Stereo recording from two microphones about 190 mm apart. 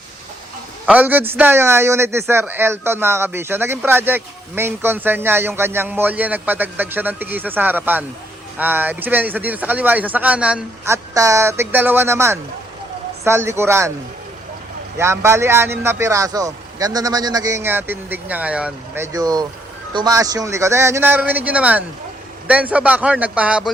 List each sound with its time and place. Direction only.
0.9 s a man's voice: 10° right (ahead or behind)
14.9 s a man's voice: 15° right (ahead or behind)
19.1 s a man's voice: 20° right (ahead or behind)